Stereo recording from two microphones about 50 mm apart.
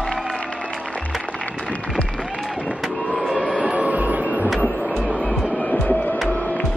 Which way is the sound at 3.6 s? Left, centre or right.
Right.